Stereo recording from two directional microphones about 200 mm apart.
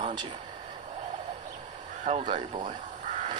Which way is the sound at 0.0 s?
20° right (ahead or behind).